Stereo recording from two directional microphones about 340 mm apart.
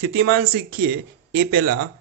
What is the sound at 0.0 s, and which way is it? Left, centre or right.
Speech, right.